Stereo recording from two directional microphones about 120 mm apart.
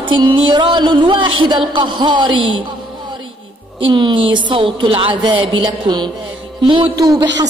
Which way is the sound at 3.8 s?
45° right (ahead or behind).